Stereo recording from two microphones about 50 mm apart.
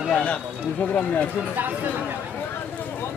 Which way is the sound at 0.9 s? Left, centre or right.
Left.